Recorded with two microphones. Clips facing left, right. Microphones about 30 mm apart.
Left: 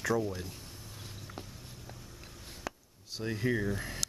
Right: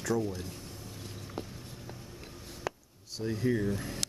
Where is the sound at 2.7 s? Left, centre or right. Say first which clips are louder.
Right 4 dB; centre.